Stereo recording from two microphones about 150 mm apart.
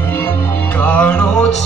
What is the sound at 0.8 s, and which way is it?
Music, 10° left (ahead or behind).